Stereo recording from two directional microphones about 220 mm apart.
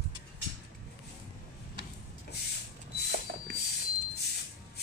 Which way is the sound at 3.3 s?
45° right (ahead or behind).